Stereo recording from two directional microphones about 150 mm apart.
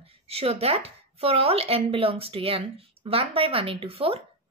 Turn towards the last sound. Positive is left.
turn(degrees=-40)  # may be behind; listen again after turning